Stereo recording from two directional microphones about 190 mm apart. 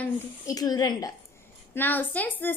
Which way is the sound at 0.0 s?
20° left (ahead or behind).